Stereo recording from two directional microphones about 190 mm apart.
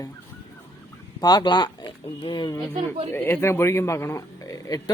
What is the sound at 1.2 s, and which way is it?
A man's voice, 20° left (ahead or behind).